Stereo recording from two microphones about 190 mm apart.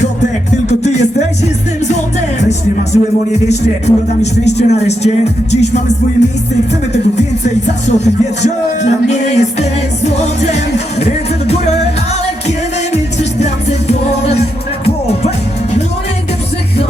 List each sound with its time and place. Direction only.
0.7 s music: 35° left (ahead or behind)
2.4 s speech: 35° left (ahead or behind)
6.9 s speech: 35° left (ahead or behind)
13.1 s music: 35° left (ahead or behind)